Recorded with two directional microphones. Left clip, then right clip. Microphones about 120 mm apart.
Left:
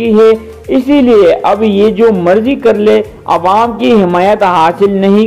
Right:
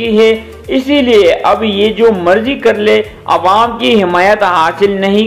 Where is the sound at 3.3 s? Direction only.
20° left (ahead or behind).